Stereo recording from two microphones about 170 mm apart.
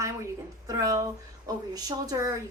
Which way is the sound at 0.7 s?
20° right (ahead or behind).